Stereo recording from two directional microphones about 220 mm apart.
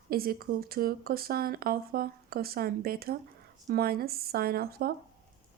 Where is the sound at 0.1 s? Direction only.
45° right (ahead or behind).